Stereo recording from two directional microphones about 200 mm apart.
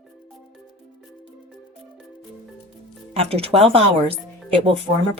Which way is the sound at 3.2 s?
30° right (ahead or behind).